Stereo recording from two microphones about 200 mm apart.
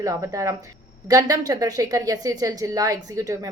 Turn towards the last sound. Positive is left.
turn(degrees=-20)  # may be behind; listen again after turning